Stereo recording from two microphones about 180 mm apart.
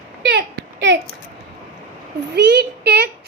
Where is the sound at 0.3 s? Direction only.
75° right (ahead or behind).